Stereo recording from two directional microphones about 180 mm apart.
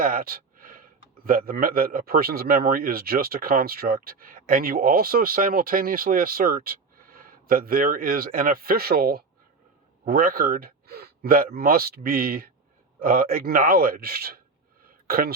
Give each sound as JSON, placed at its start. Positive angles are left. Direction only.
{"t": 0.0, "sound": "speech", "side_deg": -50}